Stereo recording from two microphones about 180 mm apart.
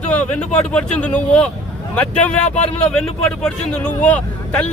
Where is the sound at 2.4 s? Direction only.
40° left (ahead or behind).